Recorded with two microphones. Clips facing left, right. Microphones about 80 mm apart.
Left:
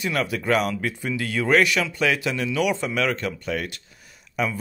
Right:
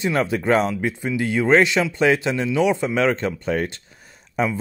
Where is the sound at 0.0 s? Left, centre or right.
Right.